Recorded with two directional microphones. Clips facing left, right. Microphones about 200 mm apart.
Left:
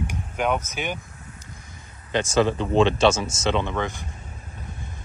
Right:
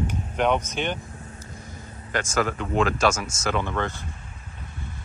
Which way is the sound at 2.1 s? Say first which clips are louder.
Left 5 dB; 25° left (ahead or behind).